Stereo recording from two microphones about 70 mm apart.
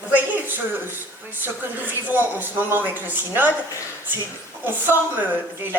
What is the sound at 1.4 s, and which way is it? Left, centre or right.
A man's voice, right.